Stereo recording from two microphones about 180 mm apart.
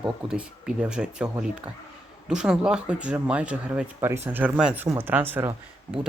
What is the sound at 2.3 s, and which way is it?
Speech, 5° right (ahead or behind).